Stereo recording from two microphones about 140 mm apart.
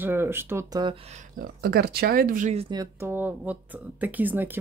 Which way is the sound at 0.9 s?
50° right (ahead or behind).